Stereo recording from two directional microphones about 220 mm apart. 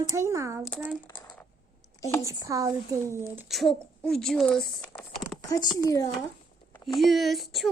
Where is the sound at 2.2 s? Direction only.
15° right (ahead or behind); by 6.1 s 15° left (ahead or behind).